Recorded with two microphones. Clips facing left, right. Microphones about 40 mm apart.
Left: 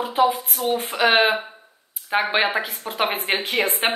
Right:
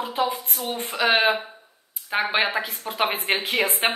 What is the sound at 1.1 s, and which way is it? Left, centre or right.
A woman's voice, centre.